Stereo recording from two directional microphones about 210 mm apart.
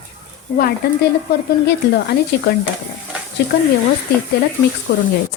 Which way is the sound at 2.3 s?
55° left (ahead or behind).